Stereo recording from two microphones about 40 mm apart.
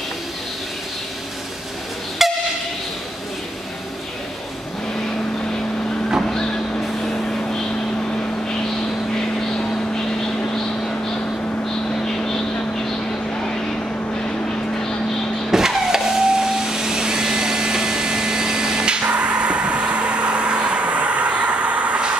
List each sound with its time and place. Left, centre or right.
2.2 s train: centre
7.0 s vehicle: centre
15.5 s vehicle: centre
19.0 s vehicle: right